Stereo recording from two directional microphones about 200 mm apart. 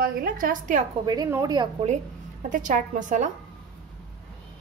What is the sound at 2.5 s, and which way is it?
Speech, 40° right (ahead or behind).